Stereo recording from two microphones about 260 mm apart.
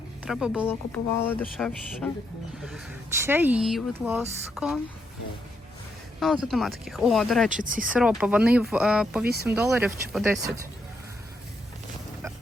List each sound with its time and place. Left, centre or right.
0.3 s speech: centre
6.1 s speech: centre
7.5 s speech: right
7.9 s speech: centre
9.2 s speech: right
9.5 s speech: centre